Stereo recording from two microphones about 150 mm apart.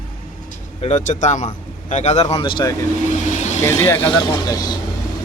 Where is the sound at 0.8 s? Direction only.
55° left (ahead or behind); by 2.7 s 30° left (ahead or behind).